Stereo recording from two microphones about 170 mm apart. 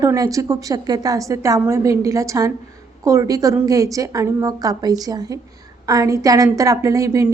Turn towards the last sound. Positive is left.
turn(degrees=-20)  # may be behind; listen again after turning